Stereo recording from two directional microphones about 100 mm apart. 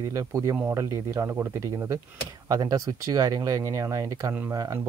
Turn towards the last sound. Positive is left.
turn(degrees=-30)  # may be behind; listen again after turning